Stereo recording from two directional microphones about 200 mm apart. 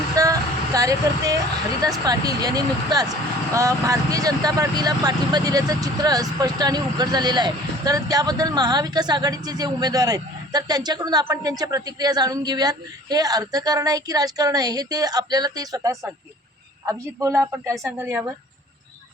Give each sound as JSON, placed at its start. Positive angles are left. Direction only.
{"t": 0.2, "sound": "vehicle", "side_deg": -15}
{"t": 2.0, "sound": "a man's voice", "side_deg": -20}